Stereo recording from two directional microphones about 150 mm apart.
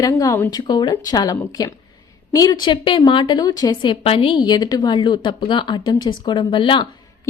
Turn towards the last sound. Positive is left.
turn(degrees=35)  # may be behind; listen again after turning